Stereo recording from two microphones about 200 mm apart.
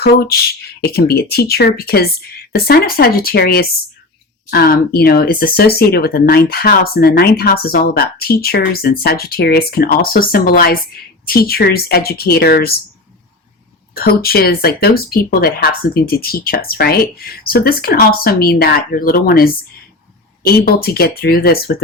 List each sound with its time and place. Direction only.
0.0 s speech: 50° left (ahead or behind)
13.9 s speech: 50° left (ahead or behind)